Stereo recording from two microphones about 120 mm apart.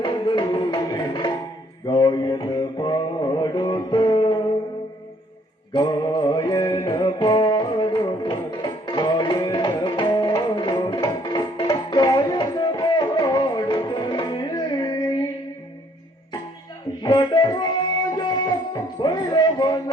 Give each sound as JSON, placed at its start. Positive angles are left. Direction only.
{"t": 0.0, "sound": "music", "side_deg": 40}
{"t": 5.7, "sound": "music", "side_deg": 40}
{"t": 17.0, "sound": "music", "side_deg": 35}